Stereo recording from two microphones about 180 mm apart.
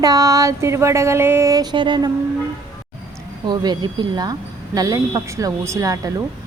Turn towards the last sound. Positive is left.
turn(degrees=-20)  # may be behind; listen again after turning